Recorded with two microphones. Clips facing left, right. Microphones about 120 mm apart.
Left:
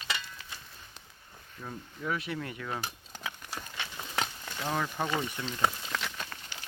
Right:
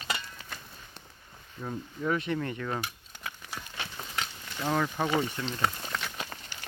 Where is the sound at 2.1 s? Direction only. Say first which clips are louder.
Right 5 dB; centre (ahead or behind).